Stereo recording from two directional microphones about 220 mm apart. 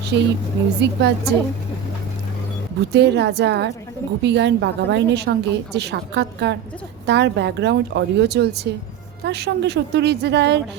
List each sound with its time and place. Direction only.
0.1 s a woman's voice: 50° right (ahead or behind)
2.9 s a woman's voice: 50° right (ahead or behind)